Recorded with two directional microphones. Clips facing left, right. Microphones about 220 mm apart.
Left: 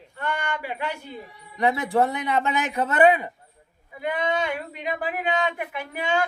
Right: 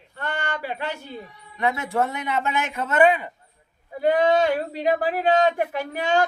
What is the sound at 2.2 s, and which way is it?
Speech, 35° left (ahead or behind).